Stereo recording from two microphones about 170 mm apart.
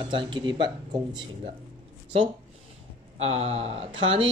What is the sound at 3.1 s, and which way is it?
Speech, 35° right (ahead or behind).